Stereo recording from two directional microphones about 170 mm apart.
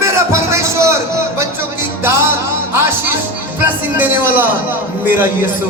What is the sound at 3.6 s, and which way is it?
A man's voice, 10° right (ahead or behind).